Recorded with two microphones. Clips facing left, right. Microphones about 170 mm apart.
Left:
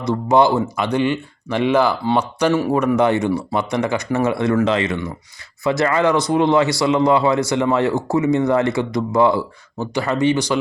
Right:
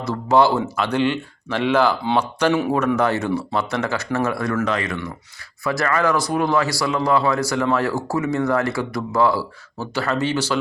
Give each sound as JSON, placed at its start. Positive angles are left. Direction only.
{"t": 0.0, "sound": "speech", "side_deg": 15}
{"t": 2.7, "sound": "speech", "side_deg": 15}